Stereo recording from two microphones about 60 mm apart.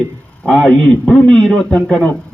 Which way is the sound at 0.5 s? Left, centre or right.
Centre.